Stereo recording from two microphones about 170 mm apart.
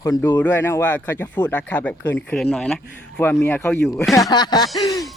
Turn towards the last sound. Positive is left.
turn(degrees=20)  # may be behind; listen again after turning